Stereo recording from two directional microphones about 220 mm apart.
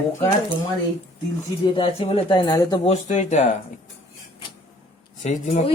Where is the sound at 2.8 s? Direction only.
30° left (ahead or behind).